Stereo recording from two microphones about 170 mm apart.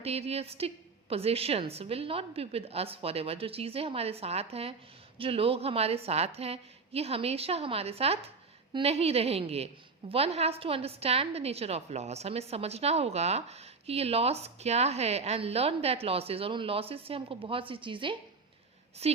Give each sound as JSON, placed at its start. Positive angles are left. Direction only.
{"t": 0.0, "sound": "a woman's voice", "side_deg": -35}